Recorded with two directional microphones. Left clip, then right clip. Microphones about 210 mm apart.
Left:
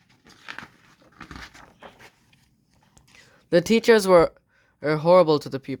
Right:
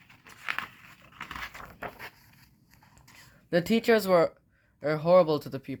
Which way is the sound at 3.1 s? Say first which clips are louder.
Left 7 dB; 55° left (ahead or behind).